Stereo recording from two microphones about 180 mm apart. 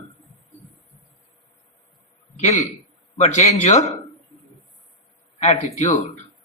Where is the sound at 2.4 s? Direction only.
40° left (ahead or behind).